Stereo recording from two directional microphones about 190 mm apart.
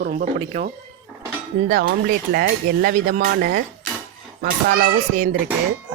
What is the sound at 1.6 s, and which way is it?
Speech, 50° right (ahead or behind).